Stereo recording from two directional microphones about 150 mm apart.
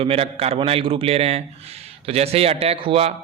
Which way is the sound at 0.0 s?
40° right (ahead or behind).